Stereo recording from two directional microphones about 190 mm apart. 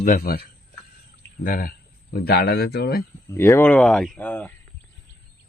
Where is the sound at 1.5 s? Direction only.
50° left (ahead or behind).